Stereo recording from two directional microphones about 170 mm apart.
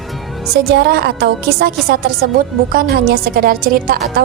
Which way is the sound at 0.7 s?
70° right (ahead or behind).